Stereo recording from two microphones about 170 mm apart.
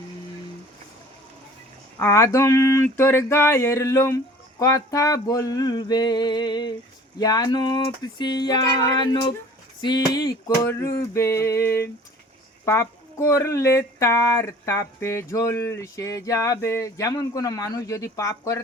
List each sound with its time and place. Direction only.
2.0 s speech: 15° left (ahead or behind)
4.6 s a sound: 20° left (ahead or behind)
9.8 s speech: 25° left (ahead or behind)